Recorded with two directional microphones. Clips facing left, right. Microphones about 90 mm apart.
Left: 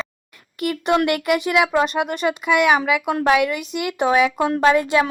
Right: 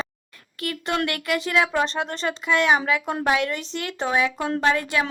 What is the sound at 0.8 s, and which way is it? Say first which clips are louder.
A woman's voice: left 7 dB; 20° left (ahead or behind).